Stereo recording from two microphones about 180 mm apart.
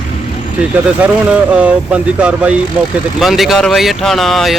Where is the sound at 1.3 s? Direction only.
5° right (ahead or behind).